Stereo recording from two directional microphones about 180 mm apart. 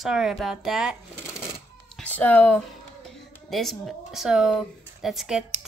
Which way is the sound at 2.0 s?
10° left (ahead or behind).